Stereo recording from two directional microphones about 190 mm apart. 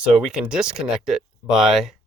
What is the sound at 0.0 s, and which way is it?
Speech, 5° right (ahead or behind).